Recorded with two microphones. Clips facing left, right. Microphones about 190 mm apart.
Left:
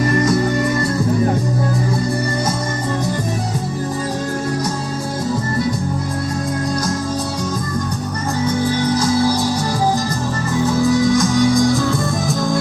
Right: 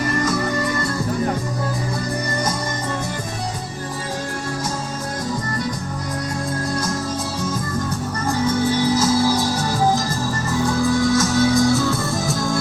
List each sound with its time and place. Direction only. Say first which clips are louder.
10.8 s music: left 4 dB; centre (ahead or behind)
11.1 s music: left 3 dB; 15° left (ahead or behind)
11.5 s music: left 2 dB; 5° right (ahead or behind)